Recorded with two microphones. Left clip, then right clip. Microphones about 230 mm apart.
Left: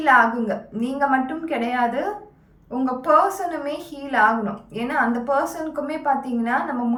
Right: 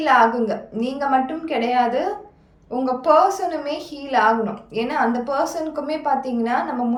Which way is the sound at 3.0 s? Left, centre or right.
Centre.